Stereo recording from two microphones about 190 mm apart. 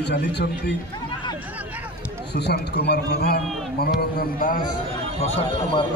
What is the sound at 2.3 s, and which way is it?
A man's voice, 60° left (ahead or behind).